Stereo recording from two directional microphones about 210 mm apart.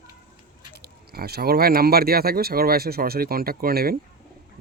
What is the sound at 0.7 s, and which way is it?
Speech, 50° right (ahead or behind).